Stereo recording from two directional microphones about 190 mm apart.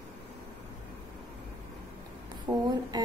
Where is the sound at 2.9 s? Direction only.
20° right (ahead or behind).